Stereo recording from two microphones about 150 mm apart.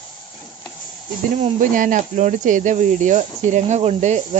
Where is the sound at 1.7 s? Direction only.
60° right (ahead or behind).